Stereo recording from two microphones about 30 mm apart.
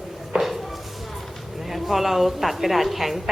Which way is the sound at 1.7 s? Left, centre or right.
Centre.